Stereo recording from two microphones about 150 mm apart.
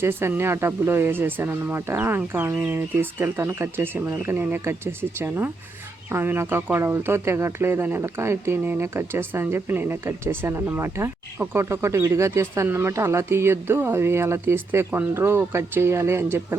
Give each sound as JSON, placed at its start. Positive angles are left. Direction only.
{"t": 0.0, "sound": "speech", "side_deg": -15}